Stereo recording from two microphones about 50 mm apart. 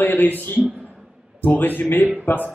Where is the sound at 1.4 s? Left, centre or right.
Left.